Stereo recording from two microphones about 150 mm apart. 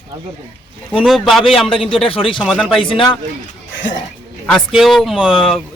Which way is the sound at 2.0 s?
40° left (ahead or behind).